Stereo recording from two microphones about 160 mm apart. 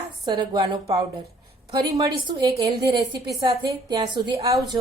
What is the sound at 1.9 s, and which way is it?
A woman's voice, 20° right (ahead or behind).